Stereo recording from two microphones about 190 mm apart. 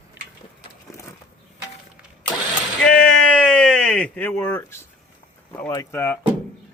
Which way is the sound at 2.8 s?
5° left (ahead or behind).